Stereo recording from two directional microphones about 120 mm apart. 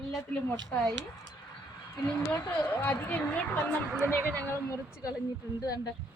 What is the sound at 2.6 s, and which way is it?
A woman's voice, 15° left (ahead or behind).